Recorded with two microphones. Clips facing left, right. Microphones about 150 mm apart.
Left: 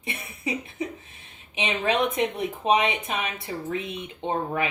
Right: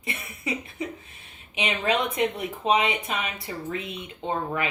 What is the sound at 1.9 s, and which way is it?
Speech, 20° left (ahead or behind).